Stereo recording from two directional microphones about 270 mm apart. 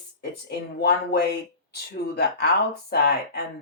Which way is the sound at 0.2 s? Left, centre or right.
Left.